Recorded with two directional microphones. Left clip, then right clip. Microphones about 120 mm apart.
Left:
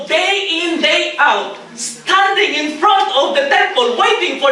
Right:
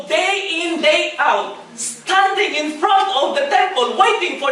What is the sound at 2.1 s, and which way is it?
A woman's voice, 15° right (ahead or behind).